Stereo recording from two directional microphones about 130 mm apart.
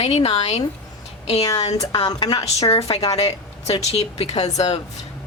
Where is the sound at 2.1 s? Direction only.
30° left (ahead or behind).